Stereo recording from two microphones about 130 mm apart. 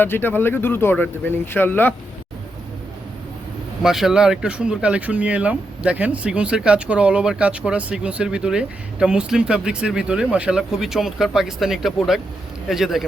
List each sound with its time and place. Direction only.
0.0 s speech: 15° left (ahead or behind)
3.8 s a man's voice: 5° right (ahead or behind)